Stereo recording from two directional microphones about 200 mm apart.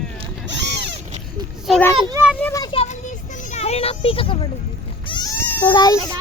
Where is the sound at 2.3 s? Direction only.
15° left (ahead or behind).